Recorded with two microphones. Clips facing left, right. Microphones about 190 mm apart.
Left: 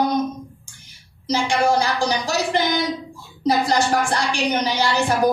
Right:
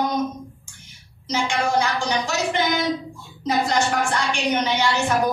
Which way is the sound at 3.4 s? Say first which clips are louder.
Left 3 dB; 35° left (ahead or behind).